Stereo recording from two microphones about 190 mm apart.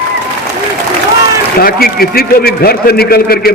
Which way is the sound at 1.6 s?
50° left (ahead or behind).